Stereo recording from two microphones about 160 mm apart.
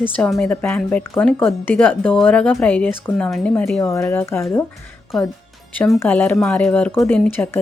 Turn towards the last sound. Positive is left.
turn(degrees=15)  # may be behind; listen again after turning